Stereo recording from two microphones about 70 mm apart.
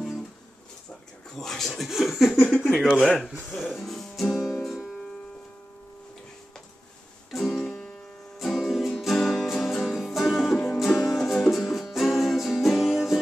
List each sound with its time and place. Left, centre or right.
1.3 s speech: centre
3.7 s music: centre
7.2 s music: centre